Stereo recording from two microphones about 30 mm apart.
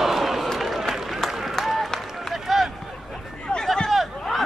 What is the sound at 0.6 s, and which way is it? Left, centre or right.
Run, centre.